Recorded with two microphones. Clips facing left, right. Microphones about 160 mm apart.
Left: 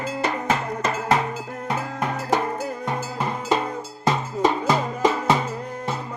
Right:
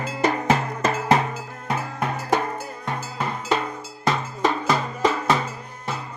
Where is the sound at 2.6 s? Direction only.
15° left (ahead or behind).